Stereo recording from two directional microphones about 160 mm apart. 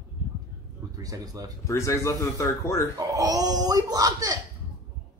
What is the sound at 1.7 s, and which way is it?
A man's voice, 20° left (ahead or behind).